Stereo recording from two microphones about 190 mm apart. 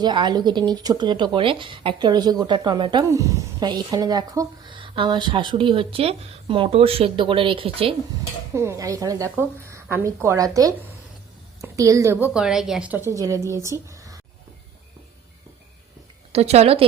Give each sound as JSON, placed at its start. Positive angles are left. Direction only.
{"t": 0.0, "sound": "speech", "side_deg": -25}
{"t": 8.5, "sound": "a woman's voice", "side_deg": -15}
{"t": 12.3, "sound": "a woman's voice", "side_deg": -5}
{"t": 16.3, "sound": "a woman's voice", "side_deg": -35}